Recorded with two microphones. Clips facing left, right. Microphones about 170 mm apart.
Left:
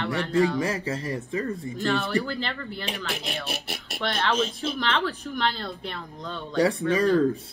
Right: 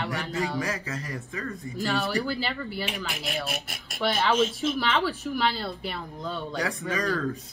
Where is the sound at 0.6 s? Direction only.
30° left (ahead or behind).